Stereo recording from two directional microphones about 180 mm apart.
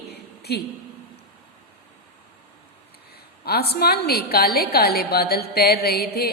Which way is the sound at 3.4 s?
60° left (ahead or behind).